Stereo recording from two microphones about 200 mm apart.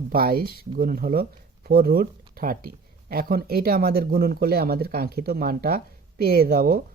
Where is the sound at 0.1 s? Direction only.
45° right (ahead or behind).